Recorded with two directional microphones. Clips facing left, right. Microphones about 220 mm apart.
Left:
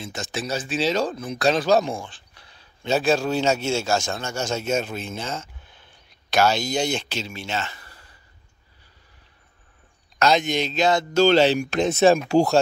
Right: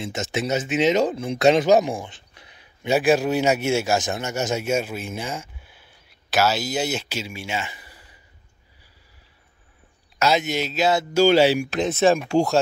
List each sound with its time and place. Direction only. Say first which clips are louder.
0.0 s speech: right 4 dB; 25° right (ahead or behind)
10.1 s speech: left 1 dB; 5° right (ahead or behind)
12.0 s speech: left 2 dB; 40° left (ahead or behind)